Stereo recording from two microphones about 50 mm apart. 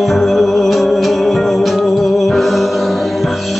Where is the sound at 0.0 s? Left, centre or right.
Centre.